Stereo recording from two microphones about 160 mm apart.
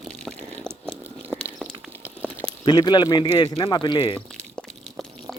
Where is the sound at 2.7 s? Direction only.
25° left (ahead or behind).